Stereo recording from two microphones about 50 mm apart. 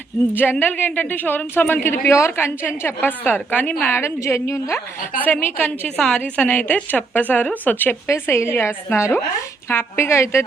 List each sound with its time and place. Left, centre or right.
0.4 s speech: centre
0.8 s a woman's voice: left
2.0 s a woman's voice: left
2.3 s a woman's voice: left
3.8 s a woman's voice: left
5.2 s a woman's voice: left
6.0 s a woman's voice: left
6.4 s a woman's voice: left
8.0 s a woman's voice: left